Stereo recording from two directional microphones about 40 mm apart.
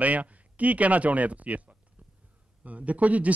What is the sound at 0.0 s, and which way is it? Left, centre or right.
Speech, right.